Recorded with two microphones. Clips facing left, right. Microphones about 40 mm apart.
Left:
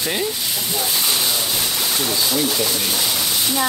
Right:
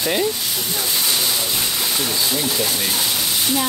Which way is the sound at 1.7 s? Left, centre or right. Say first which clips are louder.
Left 1 dB; centre.